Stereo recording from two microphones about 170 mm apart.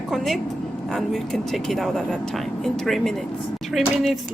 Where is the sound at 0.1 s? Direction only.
Centre (ahead or behind).